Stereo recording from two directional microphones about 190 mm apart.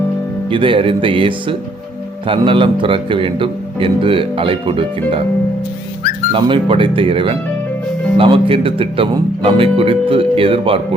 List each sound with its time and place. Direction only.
0.5 s speech: 25° right (ahead or behind)
6.3 s speech: 25° right (ahead or behind)